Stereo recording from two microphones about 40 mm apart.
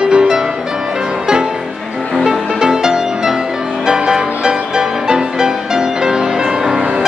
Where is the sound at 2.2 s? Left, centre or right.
Centre.